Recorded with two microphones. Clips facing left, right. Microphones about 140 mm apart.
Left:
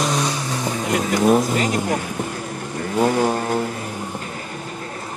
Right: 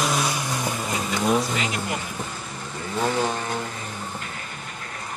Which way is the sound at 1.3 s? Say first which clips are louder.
Left 6 dB; 45° left (ahead or behind).